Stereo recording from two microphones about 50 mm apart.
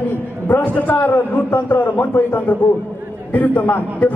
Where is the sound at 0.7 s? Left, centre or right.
Left.